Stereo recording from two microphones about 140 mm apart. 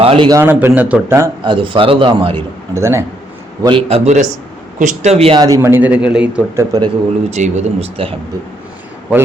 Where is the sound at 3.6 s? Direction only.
35° right (ahead or behind).